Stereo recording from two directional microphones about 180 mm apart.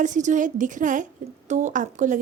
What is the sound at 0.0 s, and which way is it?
A woman's voice, 45° right (ahead or behind).